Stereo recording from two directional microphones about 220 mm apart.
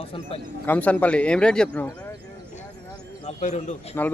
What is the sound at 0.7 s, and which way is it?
A man's voice, 5° left (ahead or behind).